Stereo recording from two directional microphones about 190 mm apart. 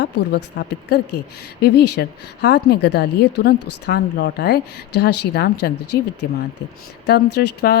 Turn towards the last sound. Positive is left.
turn(degrees=60)  # may be behind; listen again after turning